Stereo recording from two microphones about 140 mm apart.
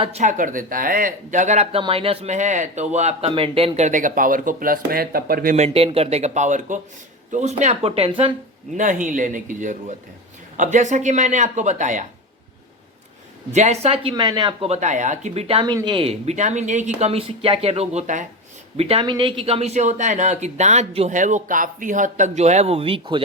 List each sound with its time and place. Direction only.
0.0 s speech: 55° right (ahead or behind)
1.8 s speech: 40° right (ahead or behind); by 5.5 s 90° right
5.5 s speech: 45° right (ahead or behind)
8.7 s speech: 65° right (ahead or behind)
13.5 s speech: 55° right (ahead or behind)
14.1 s speech: 35° right (ahead or behind)
14.7 s speech: 60° right (ahead or behind)
15.6 s speech: 30° right (ahead or behind); by 18.3 s 60° right (ahead or behind)
18.8 s speech: 45° right (ahead or behind)
21.2 s speech: 65° right (ahead or behind); by 23.2 s 40° right (ahead or behind)